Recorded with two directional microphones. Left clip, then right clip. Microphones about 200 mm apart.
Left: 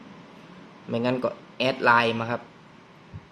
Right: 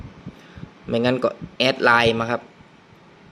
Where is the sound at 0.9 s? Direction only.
30° right (ahead or behind).